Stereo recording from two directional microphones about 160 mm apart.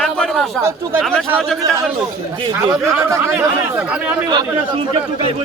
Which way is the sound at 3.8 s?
5° right (ahead or behind).